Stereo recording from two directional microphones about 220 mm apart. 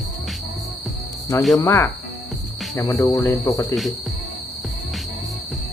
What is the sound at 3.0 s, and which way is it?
Cricket, 15° left (ahead or behind).